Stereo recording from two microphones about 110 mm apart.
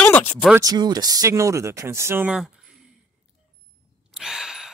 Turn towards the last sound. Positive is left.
turn(degrees=-5)  # may be behind; listen again after turning